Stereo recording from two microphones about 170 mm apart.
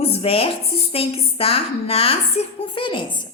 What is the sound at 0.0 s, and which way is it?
A woman's voice, 35° left (ahead or behind).